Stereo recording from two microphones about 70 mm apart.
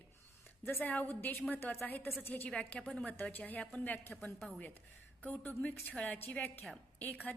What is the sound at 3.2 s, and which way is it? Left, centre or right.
Speech, left.